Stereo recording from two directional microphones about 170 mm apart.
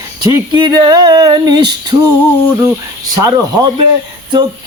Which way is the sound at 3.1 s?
20° right (ahead or behind).